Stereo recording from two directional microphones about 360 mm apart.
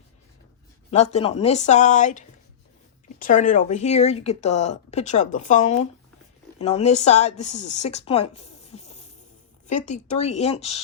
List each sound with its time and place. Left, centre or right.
0.9 s a woman's voice: centre